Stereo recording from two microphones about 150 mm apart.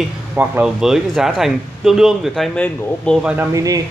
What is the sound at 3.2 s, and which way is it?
Speech, 10° right (ahead or behind).